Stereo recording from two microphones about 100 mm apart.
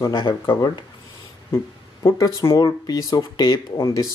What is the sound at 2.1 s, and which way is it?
Speech, 30° left (ahead or behind).